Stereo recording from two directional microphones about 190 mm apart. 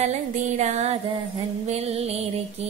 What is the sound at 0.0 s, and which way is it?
Music, 35° right (ahead or behind).